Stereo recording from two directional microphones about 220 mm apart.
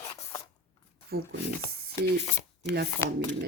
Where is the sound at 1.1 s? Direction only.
45° right (ahead or behind).